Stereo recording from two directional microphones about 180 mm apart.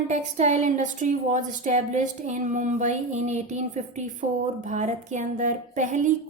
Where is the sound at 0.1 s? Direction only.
40° right (ahead or behind).